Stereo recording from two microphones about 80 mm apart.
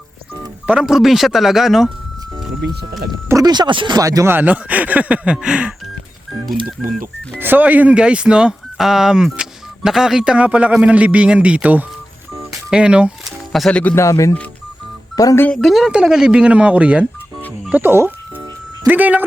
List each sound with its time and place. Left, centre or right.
0.8 s speech: centre
3.4 s speech: right
3.9 s speech: right
4.3 s speech: right
6.8 s speech: centre
7.3 s speech: right
12.5 s telephone dialing: centre
13.5 s speech: centre
13.9 s speech: left
15.4 s speech: centre
15.9 s speech: centre
17.7 s music: right
18.9 s speech: right